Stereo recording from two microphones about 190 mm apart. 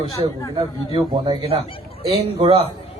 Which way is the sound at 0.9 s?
25° right (ahead or behind).